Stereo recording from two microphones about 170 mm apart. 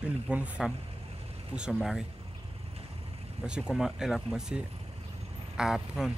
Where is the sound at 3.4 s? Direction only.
5° right (ahead or behind).